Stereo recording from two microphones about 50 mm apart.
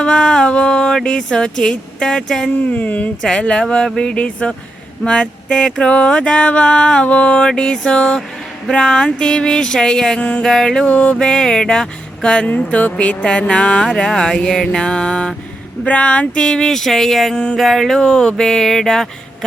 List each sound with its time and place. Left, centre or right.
0.0 s speech: centre
2.6 s mantra: left
3.4 s speech: centre
3.8 s mantra: centre
8.7 s speech: centre
10.8 s speech: left
12.5 s mantra: left
15.9 s speech: left; by 17.3 s centre
17.3 s mantra: centre
17.6 s speech: centre